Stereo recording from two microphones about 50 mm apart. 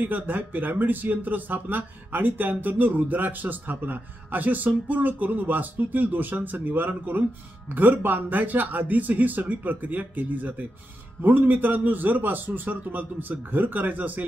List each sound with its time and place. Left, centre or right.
0.0 s speech: right